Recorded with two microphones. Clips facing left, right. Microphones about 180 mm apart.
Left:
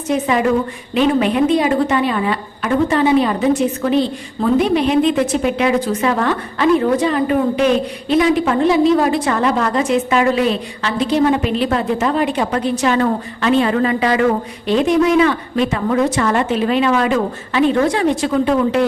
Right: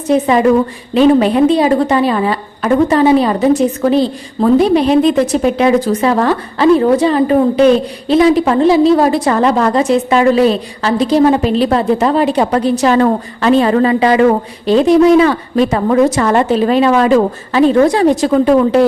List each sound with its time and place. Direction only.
0.1 s a woman's voice: 35° right (ahead or behind)